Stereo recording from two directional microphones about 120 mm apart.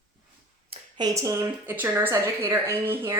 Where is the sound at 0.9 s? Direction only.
30° right (ahead or behind).